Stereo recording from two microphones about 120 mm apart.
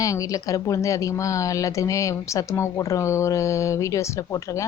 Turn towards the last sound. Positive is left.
turn(degrees=25)  # may be behind; listen again after turning